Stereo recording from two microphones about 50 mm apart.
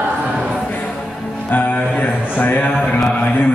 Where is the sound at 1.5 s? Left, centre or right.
Left.